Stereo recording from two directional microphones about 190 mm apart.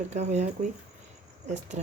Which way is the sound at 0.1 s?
35° right (ahead or behind).